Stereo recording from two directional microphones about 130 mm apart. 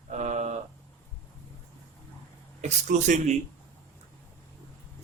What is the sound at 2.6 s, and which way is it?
Speech, 65° right (ahead or behind).